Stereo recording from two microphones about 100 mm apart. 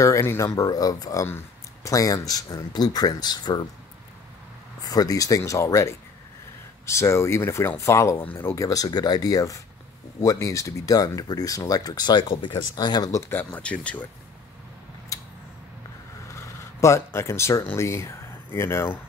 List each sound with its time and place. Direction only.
0.0 s speech: 30° left (ahead or behind)
4.8 s speech: 40° left (ahead or behind)
8.6 s speech: 40° left (ahead or behind)
12.7 s speech: 45° left (ahead or behind)
13.3 s speech: 15° left (ahead or behind)
15.1 s a sound: 35° left (ahead or behind)
16.3 s speech: 30° left (ahead or behind)